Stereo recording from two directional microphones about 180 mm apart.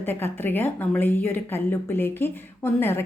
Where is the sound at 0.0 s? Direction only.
10° left (ahead or behind).